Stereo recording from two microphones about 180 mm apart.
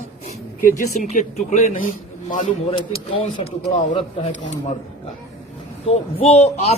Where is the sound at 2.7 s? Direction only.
30° left (ahead or behind).